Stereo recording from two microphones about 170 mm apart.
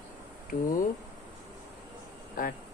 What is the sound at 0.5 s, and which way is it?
Speech, 55° left (ahead or behind).